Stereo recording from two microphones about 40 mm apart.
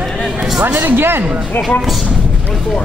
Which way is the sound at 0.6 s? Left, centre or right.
Right.